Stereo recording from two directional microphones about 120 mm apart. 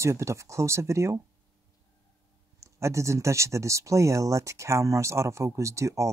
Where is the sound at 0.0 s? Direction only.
25° right (ahead or behind).